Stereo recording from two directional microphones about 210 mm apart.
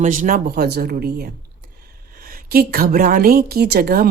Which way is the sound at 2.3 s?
45° right (ahead or behind).